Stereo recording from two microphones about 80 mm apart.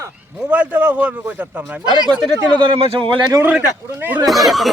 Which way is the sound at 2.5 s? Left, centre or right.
Right.